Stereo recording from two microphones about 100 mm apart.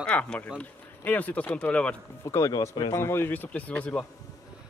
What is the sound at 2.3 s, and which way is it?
Speech, 30° left (ahead or behind).